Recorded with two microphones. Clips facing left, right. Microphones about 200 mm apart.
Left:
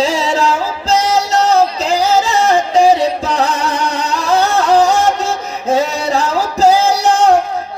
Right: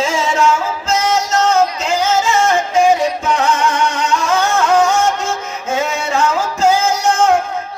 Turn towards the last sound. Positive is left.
turn(degrees=35)  # may be behind; listen again after turning